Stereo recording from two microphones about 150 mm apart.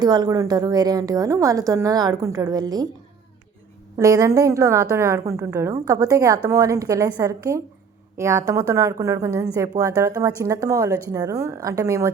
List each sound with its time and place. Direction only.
0.0 s a woman's voice: 30° right (ahead or behind)
3.9 s a woman's voice: 20° right (ahead or behind)